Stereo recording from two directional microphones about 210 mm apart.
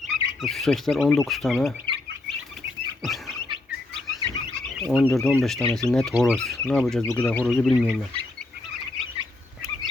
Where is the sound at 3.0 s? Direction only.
Centre (ahead or behind).